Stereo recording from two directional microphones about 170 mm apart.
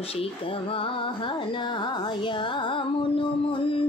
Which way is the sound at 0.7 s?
30° left (ahead or behind).